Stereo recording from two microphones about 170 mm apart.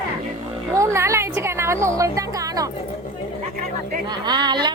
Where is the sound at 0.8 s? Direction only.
15° right (ahead or behind).